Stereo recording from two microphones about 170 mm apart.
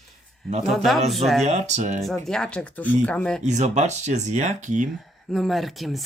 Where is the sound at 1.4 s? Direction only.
40° right (ahead or behind).